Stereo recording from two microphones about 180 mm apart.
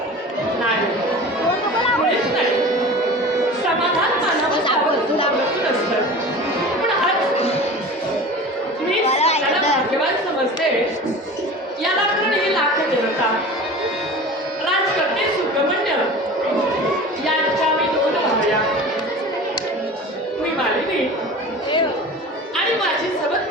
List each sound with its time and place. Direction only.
9.0 s chatter: 35° left (ahead or behind)